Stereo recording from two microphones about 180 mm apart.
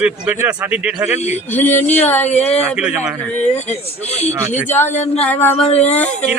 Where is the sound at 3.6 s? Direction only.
35° left (ahead or behind).